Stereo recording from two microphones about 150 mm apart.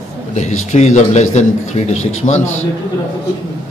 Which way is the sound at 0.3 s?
50° left (ahead or behind).